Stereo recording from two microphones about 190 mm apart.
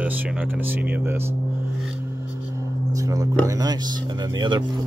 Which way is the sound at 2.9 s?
20° right (ahead or behind).